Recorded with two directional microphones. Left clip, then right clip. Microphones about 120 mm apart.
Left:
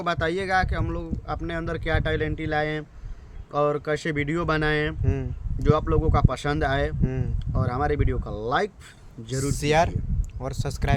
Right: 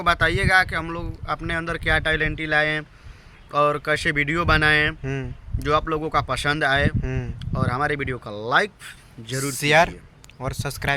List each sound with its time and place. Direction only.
0.0 s speech: 25° left (ahead or behind)
5.0 s speech: 20° right (ahead or behind)
5.5 s speech: 30° left (ahead or behind)
7.0 s speech: 20° right (ahead or behind)
7.5 s speech: 25° left (ahead or behind)
9.5 s speech: 25° right (ahead or behind)